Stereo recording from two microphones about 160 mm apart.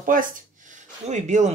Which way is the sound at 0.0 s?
60° right (ahead or behind).